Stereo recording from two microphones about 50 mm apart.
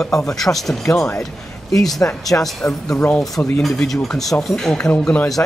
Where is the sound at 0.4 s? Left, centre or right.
Centre.